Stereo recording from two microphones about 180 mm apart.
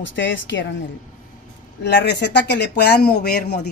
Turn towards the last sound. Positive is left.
turn(degrees=60)  # may be behind; listen again after turning